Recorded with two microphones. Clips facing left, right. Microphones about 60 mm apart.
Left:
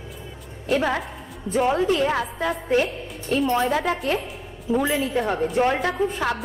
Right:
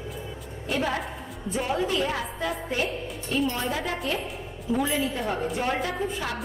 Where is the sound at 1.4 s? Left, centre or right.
Left.